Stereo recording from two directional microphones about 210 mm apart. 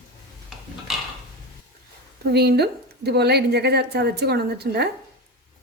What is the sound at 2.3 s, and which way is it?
A woman's voice, 50° right (ahead or behind).